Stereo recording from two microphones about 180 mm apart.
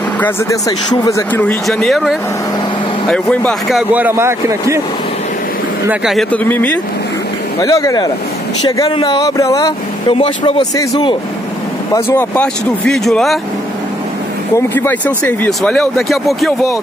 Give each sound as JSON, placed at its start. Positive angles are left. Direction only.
{"t": 0.2, "sound": "speech", "side_deg": 20}
{"t": 3.9, "sound": "speech", "side_deg": -10}
{"t": 5.9, "sound": "speech", "side_deg": 0}
{"t": 6.4, "sound": "speech", "side_deg": 10}
{"t": 14.7, "sound": "speech", "side_deg": 10}